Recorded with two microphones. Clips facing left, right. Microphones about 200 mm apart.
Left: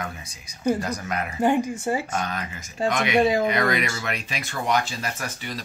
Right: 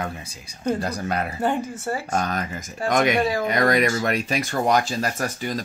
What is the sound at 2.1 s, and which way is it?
Speech, 40° right (ahead or behind).